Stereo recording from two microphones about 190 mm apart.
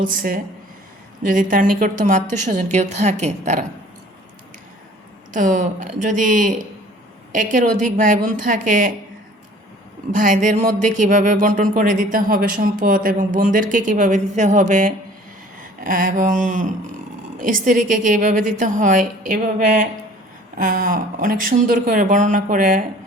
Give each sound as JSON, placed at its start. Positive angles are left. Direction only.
{"t": 0.1, "sound": "a woman's voice", "side_deg": -45}
{"t": 5.3, "sound": "speech", "side_deg": -40}
{"t": 10.1, "sound": "speech", "side_deg": -40}